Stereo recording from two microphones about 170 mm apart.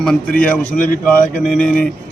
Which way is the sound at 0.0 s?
5° left (ahead or behind).